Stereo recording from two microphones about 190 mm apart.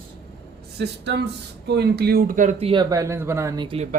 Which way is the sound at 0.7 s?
60° right (ahead or behind).